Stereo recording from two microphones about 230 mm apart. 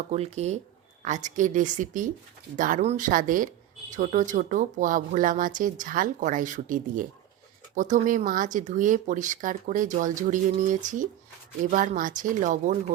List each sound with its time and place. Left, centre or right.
0.1 s speech: right